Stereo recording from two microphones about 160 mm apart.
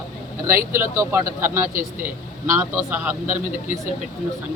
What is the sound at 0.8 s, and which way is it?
Speech, 15° right (ahead or behind).